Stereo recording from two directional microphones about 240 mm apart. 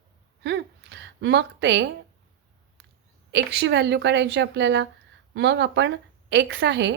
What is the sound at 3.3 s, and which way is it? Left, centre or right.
A woman's voice, right.